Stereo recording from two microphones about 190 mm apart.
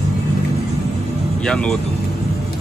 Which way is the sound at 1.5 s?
5° left (ahead or behind).